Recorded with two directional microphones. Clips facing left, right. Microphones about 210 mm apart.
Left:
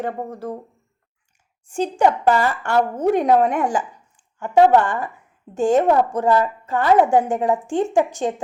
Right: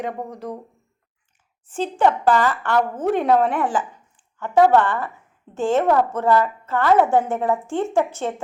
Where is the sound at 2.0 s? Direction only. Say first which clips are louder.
Even; 15° left (ahead or behind).